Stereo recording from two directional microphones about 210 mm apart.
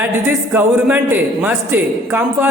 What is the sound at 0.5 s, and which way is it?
Speech, 10° right (ahead or behind).